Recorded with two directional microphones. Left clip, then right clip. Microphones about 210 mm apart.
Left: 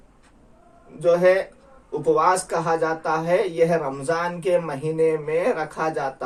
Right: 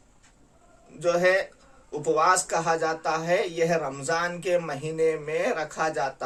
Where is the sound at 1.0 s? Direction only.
25° right (ahead or behind).